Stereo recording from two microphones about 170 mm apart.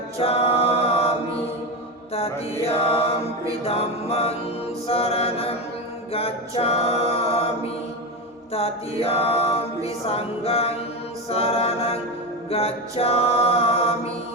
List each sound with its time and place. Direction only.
0.2 s a capella: 35° left (ahead or behind)
2.6 s mantra: 35° left (ahead or behind)
3.6 s a capella: 35° left (ahead or behind)
6.1 s music: 35° left (ahead or behind)
8.5 s a capella: 35° left (ahead or behind)
12.5 s mantra: 35° left (ahead or behind)